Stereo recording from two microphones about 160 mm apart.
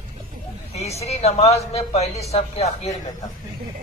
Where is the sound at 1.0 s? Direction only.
40° left (ahead or behind).